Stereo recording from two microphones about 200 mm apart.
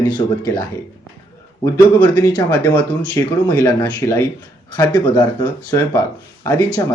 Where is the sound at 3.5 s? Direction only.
20° left (ahead or behind).